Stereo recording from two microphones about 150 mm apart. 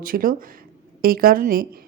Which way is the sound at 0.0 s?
70° right (ahead or behind).